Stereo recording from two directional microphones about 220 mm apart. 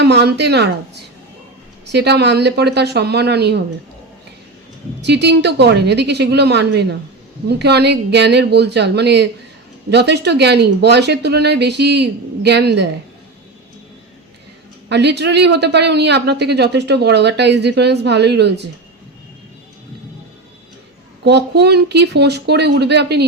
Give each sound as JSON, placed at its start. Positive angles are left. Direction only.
{"t": 0.0, "sound": "speech", "side_deg": -50}
{"t": 1.9, "sound": "speech", "side_deg": -50}
{"t": 5.0, "sound": "speech", "side_deg": -50}
{"t": 14.8, "sound": "speech", "side_deg": -50}
{"t": 21.2, "sound": "speech", "side_deg": -50}